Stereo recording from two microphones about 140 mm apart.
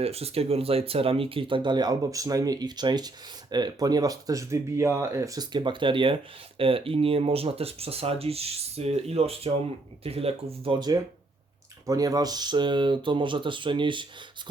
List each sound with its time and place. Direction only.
0.0 s speech: 45° right (ahead or behind)
10.8 s speech: 30° right (ahead or behind)